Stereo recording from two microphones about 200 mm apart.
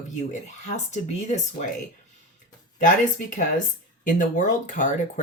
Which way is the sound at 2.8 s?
40° left (ahead or behind).